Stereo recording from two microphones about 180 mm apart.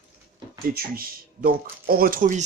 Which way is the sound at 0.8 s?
55° right (ahead or behind).